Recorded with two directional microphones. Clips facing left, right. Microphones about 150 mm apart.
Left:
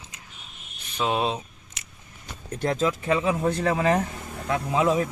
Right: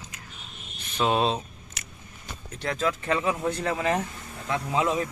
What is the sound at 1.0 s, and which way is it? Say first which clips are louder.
Speech: right 1 dB; 10° left (ahead or behind).